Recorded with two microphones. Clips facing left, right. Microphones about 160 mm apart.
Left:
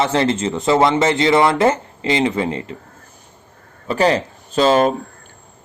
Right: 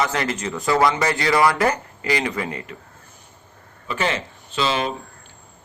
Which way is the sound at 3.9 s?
35° left (ahead or behind).